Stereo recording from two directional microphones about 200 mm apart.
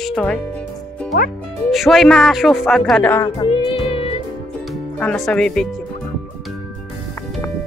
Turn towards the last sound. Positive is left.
turn(degrees=0)  # may be behind; listen again after turning